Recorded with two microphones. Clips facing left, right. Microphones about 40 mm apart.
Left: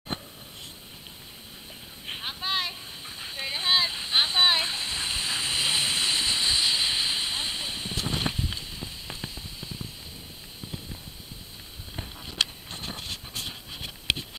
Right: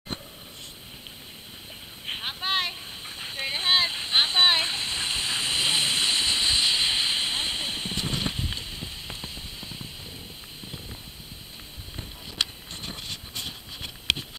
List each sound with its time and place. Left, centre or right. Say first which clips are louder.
2.0 s a sound: right 2 dB; centre
12.8 s pant: even; centre
13.5 s writing: even; centre